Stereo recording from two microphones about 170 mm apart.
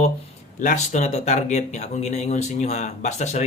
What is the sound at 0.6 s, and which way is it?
A man's voice, 45° left (ahead or behind).